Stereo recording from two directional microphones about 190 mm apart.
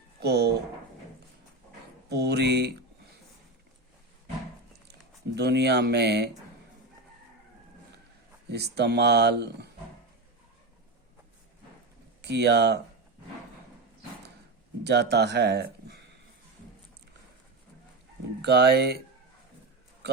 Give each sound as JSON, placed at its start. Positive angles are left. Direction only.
{"t": 0.2, "sound": "a sound", "side_deg": -60}
{"t": 2.0, "sound": "speech", "side_deg": -60}
{"t": 4.9, "sound": "speech", "side_deg": -60}
{"t": 8.4, "sound": "speech", "side_deg": -60}
{"t": 12.2, "sound": "speech", "side_deg": -60}
{"t": 14.8, "sound": "speech", "side_deg": -60}
{"t": 18.4, "sound": "speech", "side_deg": -60}